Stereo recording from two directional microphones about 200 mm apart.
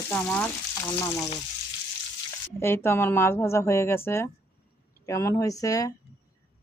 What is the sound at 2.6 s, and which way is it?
Speech, 10° left (ahead or behind).